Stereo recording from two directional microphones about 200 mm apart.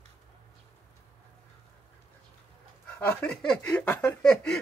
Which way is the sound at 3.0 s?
5° left (ahead or behind).